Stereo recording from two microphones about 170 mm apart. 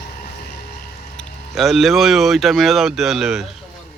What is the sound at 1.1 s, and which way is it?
Speech, centre (ahead or behind).